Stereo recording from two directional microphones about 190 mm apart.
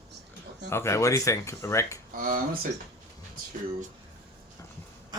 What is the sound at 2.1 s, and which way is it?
Speech, 45° right (ahead or behind).